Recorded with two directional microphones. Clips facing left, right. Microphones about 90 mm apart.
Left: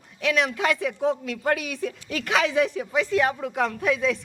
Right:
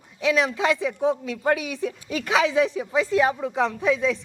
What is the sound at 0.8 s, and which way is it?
Speech, 15° right (ahead or behind).